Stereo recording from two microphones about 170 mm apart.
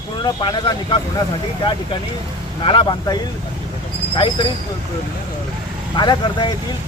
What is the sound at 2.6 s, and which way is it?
Speech, 30° left (ahead or behind).